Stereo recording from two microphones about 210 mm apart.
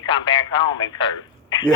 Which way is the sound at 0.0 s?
20° left (ahead or behind).